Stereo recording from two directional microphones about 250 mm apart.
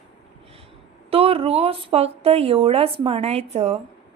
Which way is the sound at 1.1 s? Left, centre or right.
Right.